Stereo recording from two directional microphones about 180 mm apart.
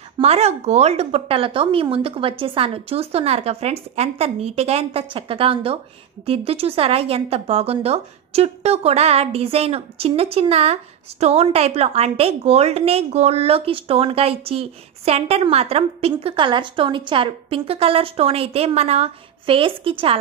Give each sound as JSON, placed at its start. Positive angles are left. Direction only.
{"t": 0.2, "sound": "a woman's voice", "side_deg": -35}